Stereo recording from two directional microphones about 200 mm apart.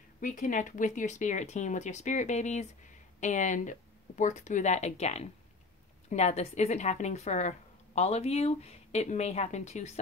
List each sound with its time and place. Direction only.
0.2 s speech: 40° left (ahead or behind)